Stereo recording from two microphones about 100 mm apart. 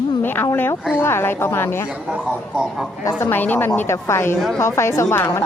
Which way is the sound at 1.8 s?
10° right (ahead or behind).